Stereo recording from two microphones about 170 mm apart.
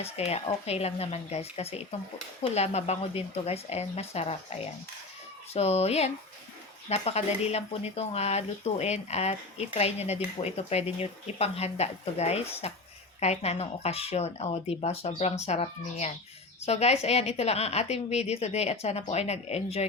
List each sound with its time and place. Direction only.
0.0 s speech: 35° left (ahead or behind)